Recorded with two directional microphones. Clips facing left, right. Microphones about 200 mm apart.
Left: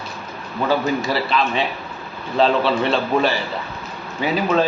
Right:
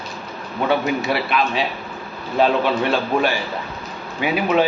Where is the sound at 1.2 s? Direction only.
10° right (ahead or behind).